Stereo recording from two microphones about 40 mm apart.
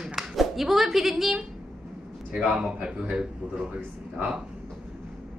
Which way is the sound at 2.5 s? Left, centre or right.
Right.